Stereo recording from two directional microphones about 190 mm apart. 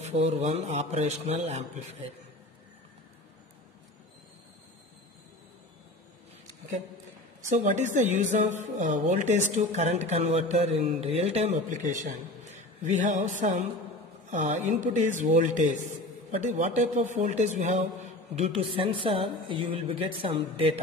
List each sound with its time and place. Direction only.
0.0 s a woman's voice: 35° right (ahead or behind)
7.4 s a woman's voice: 40° right (ahead or behind)